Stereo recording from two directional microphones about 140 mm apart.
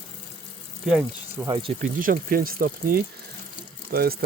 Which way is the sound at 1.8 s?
75° right (ahead or behind).